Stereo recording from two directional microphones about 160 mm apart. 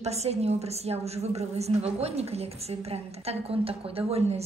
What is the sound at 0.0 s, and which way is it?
A woman's voice, 40° right (ahead or behind).